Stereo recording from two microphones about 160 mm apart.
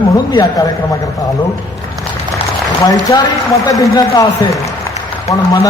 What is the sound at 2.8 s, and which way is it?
A man's voice, 25° left (ahead or behind).